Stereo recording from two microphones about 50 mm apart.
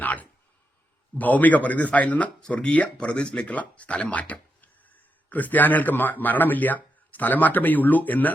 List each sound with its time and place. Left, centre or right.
0.0 s a sound: left
1.2 s a man's voice: left; by 3.4 s centre
3.4 s speech: left